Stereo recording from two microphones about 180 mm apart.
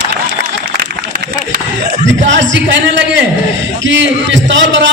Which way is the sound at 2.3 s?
90° right.